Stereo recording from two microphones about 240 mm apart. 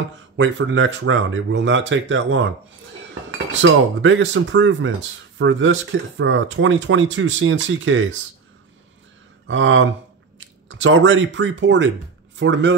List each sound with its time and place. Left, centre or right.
0.4 s speech: right
3.6 s speech: right
9.5 s speech: right